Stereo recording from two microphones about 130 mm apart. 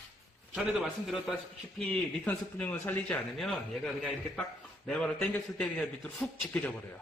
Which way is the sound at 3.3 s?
Centre (ahead or behind).